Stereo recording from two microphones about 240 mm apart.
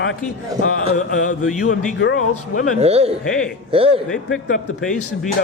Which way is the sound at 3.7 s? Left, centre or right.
Right.